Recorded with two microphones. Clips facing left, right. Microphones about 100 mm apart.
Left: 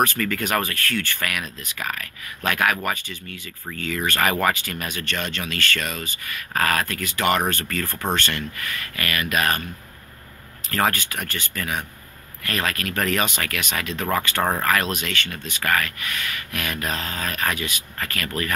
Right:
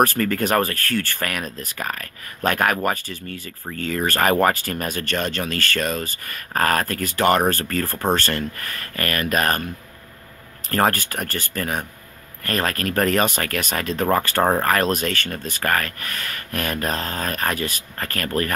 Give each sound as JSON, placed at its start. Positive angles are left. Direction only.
{"t": 0.0, "sound": "speech", "side_deg": -40}
{"t": 10.7, "sound": "speech", "side_deg": -40}